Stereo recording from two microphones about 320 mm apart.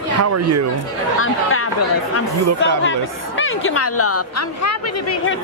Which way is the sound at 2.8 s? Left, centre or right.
Left.